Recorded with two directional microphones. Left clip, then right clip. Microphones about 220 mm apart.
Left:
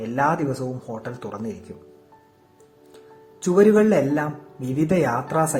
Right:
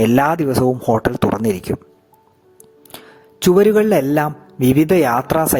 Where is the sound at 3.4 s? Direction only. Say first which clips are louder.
Right 4 dB; 45° right (ahead or behind).